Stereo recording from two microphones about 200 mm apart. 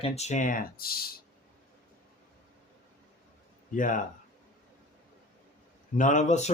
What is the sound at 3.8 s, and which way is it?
Speech, 40° left (ahead or behind).